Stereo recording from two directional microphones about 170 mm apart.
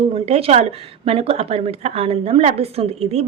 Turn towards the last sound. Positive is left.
turn(degrees=-35)  # may be behind; listen again after turning